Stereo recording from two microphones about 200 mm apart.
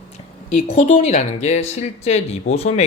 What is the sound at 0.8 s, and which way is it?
Speech, 40° left (ahead or behind).